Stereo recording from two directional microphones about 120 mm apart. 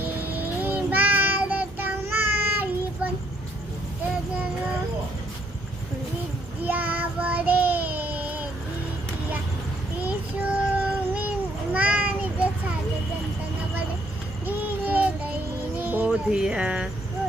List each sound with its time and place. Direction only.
0.0 s child singing: 15° right (ahead or behind)
6.7 s child singing: 15° right (ahead or behind)
10.1 s child singing: 10° right (ahead or behind)
11.7 s a sound: 10° right (ahead or behind)
14.4 s child singing: 15° right (ahead or behind)
15.8 s music: 15° right (ahead or behind)